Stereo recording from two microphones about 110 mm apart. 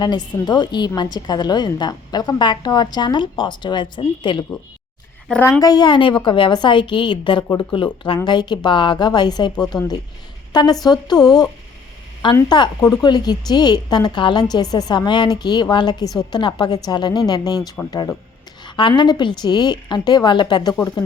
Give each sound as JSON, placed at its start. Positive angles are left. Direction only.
{"t": 0.0, "sound": "a woman's voice", "side_deg": 40}
{"t": 5.4, "sound": "a woman's voice", "side_deg": 30}
{"t": 18.6, "sound": "a woman's voice", "side_deg": 45}